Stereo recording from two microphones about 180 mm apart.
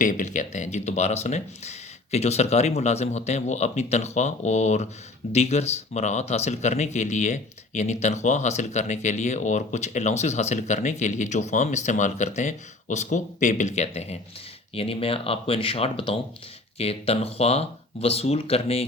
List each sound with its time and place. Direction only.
0.0 s speech: 45° left (ahead or behind)